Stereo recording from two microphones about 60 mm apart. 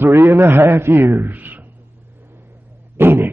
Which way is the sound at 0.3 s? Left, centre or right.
Right.